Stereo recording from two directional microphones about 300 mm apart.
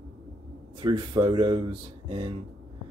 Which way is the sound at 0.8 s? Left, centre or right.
Centre.